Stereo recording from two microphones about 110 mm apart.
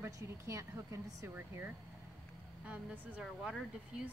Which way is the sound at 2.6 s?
10° right (ahead or behind).